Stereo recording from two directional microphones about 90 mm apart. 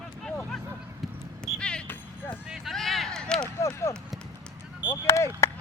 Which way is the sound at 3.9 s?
35° left (ahead or behind).